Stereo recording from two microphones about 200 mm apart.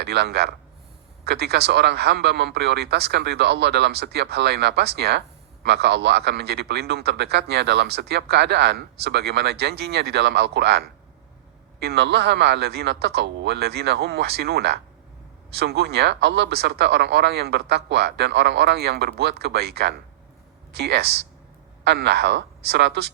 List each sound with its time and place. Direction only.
0.0 s speech: 55° right (ahead or behind)